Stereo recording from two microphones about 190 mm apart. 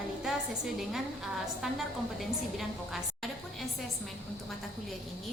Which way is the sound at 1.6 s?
Centre (ahead or behind).